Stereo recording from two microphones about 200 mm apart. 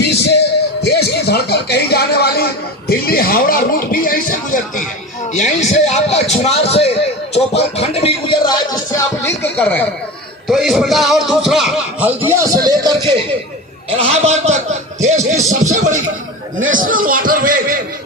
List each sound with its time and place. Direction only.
0.0 s a man's voice: 55° left (ahead or behind); by 6.9 s 30° left (ahead or behind)
7.3 s music: 30° left (ahead or behind); by 9.8 s 10° left (ahead or behind)
10.5 s a man's voice: centre (ahead or behind); by 17.7 s 45° right (ahead or behind)